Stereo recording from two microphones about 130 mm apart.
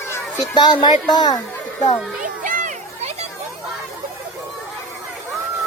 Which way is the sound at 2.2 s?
90° right.